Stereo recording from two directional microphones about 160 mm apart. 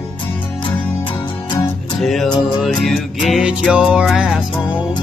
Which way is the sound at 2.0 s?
Centre (ahead or behind).